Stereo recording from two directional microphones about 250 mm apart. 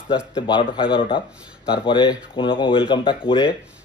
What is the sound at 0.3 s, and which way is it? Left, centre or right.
A man's voice, centre.